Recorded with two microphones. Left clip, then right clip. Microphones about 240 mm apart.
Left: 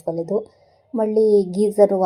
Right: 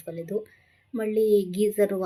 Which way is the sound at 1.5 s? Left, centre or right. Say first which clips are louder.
Left 5 dB; centre.